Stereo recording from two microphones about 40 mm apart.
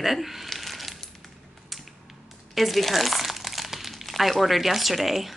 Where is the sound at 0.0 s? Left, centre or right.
Centre.